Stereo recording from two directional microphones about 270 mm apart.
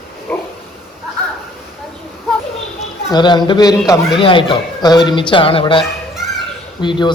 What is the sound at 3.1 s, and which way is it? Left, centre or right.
A man's voice, centre.